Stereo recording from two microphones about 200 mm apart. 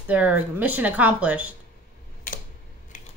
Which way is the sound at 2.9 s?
40° left (ahead or behind).